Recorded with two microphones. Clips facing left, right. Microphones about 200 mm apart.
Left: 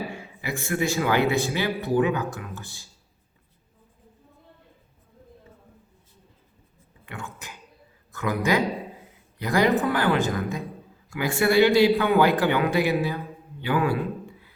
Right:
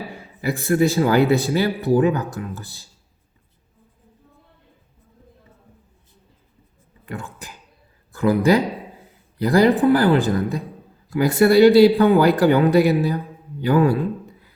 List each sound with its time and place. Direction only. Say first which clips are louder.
0.1 s speech: right 7 dB; 35° right (ahead or behind)
7.0 s speech: right 5 dB; 35° right (ahead or behind)